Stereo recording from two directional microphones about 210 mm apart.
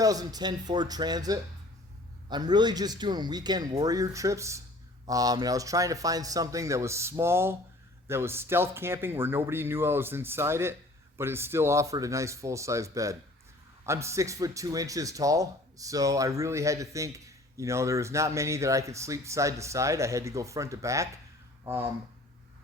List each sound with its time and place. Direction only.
0.0 s a man's voice: 15° right (ahead or behind)